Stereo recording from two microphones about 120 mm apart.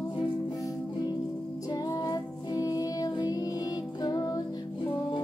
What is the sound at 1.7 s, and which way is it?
Music, 30° left (ahead or behind).